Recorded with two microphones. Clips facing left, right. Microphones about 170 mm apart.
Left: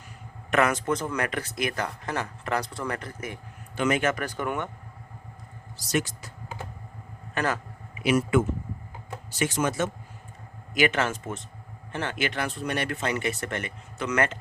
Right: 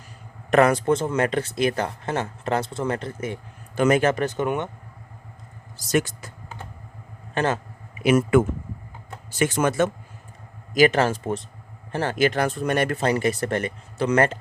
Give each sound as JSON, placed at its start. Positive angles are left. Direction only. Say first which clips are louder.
{"t": 0.5, "sound": "speech", "louder": "right 6 dB", "side_deg": -35}
{"t": 3.8, "sound": "speech", "louder": "right 6 dB", "side_deg": -40}
{"t": 4.1, "sound": "speech", "louder": "right 6 dB", "side_deg": -25}
{"t": 5.7, "sound": "speech", "louder": "right 5 dB", "side_deg": -50}
{"t": 7.3, "sound": "speech", "louder": "right 4 dB", "side_deg": -25}
{"t": 8.0, "sound": "speech", "louder": "right 5 dB", "side_deg": -50}
{"t": 10.8, "sound": "speech", "louder": "right 6 dB", "side_deg": -35}